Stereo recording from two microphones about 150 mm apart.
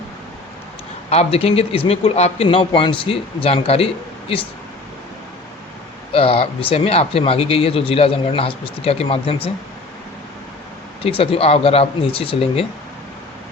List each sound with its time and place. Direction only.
1.1 s speech: 45° left (ahead or behind)
6.1 s speech: 40° left (ahead or behind)
11.0 s speech: 40° left (ahead or behind)